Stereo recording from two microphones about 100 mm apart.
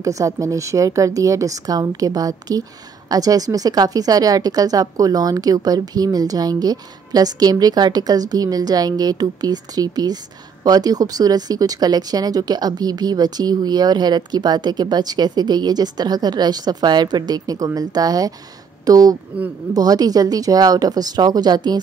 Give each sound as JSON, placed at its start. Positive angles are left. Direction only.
{"t": 0.0, "sound": "a woman's voice", "side_deg": -35}